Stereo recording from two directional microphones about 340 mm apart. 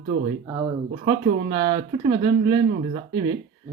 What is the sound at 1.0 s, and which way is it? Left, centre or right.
Speech, right.